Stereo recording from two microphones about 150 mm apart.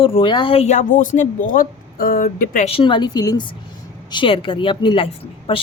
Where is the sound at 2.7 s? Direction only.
35° left (ahead or behind).